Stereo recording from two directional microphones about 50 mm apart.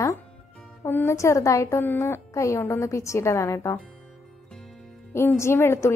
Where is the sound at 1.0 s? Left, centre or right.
Left.